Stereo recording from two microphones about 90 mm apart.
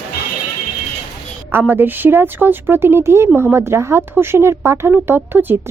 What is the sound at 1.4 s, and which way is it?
A woman's voice, 20° right (ahead or behind).